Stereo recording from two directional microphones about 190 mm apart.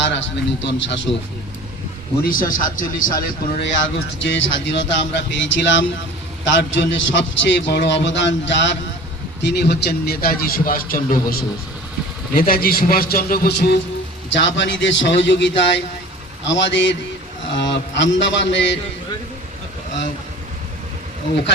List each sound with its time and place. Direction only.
0.1 s a man's voice: 70° left (ahead or behind)
2.2 s a man's voice: 45° left (ahead or behind)
4.2 s a man's voice: 75° left (ahead or behind); by 13.7 s 60° left (ahead or behind)
14.3 s a man's voice: 70° left (ahead or behind)